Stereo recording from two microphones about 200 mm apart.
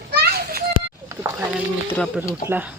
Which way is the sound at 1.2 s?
15° right (ahead or behind).